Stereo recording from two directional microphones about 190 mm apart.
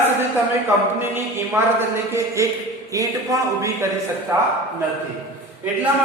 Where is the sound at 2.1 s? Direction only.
15° right (ahead or behind).